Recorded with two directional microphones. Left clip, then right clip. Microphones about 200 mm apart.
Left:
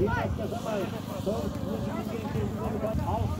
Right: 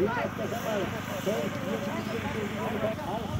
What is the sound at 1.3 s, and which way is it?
Speech, 55° right (ahead or behind).